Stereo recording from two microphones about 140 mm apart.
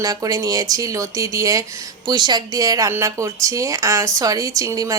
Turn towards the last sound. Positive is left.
turn(degrees=-25)  # may be behind; listen again after turning